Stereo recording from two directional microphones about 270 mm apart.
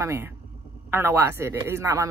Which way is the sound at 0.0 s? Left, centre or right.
Centre.